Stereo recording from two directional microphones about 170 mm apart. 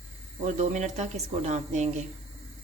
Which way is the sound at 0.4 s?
45° right (ahead or behind).